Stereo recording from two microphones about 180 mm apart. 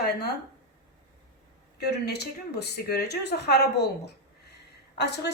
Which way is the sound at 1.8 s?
65° left (ahead or behind).